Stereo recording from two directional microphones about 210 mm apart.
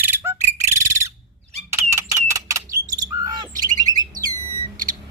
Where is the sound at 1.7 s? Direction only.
15° right (ahead or behind).